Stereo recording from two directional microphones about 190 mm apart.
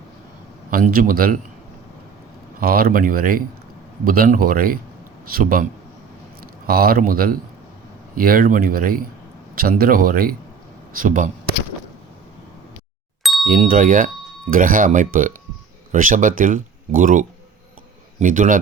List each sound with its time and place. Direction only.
0.7 s speech: 50° right (ahead or behind)
2.6 s speech: 50° right (ahead or behind)
6.7 s speech: 50° right (ahead or behind)
13.4 s speech: 45° right (ahead or behind)